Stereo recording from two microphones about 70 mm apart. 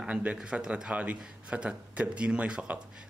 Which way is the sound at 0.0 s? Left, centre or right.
Centre.